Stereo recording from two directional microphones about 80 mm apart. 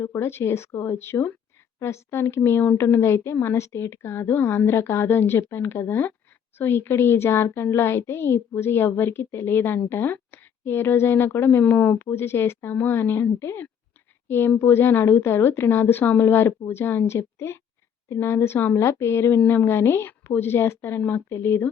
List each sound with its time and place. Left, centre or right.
0.0 s a woman's voice: left
11.9 s a woman's voice: left